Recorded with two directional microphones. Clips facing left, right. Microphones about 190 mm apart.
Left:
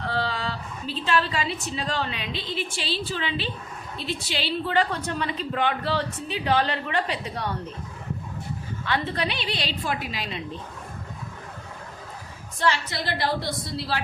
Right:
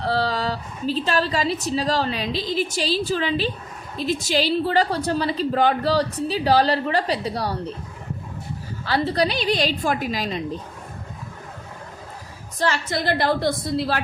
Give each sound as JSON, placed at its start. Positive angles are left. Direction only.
{"t": 0.0, "sound": "a woman's voice", "side_deg": -35}
{"t": 8.8, "sound": "a woman's voice", "side_deg": -35}
{"t": 12.5, "sound": "a woman's voice", "side_deg": -45}